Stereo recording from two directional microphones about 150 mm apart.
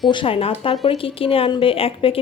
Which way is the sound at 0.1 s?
35° left (ahead or behind).